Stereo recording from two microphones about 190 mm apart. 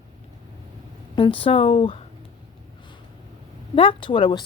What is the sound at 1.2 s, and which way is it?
Speech, 25° left (ahead or behind).